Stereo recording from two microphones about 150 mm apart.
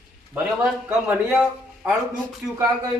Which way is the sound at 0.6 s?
10° right (ahead or behind).